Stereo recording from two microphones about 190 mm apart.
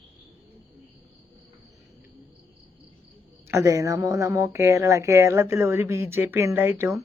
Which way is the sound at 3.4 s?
15° right (ahead or behind).